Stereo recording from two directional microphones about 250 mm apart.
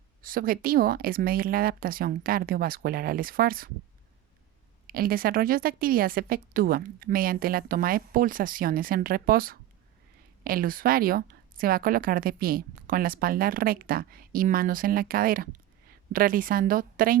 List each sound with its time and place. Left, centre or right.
0.2 s a woman's voice: right
4.9 s a woman's voice: right